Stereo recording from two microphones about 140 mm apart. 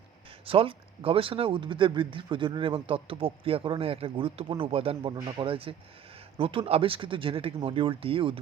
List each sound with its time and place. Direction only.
0.4 s speech: 40° right (ahead or behind)
5.1 s a man's voice: 25° right (ahead or behind)
5.5 s speech: 40° right (ahead or behind)